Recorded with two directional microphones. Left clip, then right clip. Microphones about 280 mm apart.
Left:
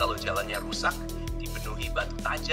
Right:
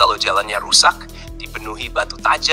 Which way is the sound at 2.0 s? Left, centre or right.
Right.